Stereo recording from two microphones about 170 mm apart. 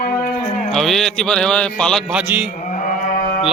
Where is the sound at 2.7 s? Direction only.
50° left (ahead or behind).